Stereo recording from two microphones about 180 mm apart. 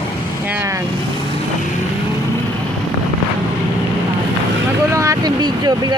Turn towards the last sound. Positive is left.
turn(degrees=-25)  # may be behind; listen again after turning